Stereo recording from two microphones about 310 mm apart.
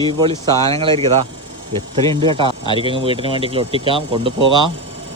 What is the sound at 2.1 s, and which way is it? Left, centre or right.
Speech, centre.